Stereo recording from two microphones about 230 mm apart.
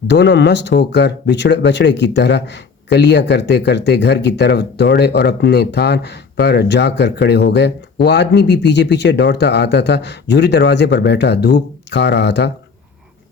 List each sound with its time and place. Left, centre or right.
0.1 s speech: left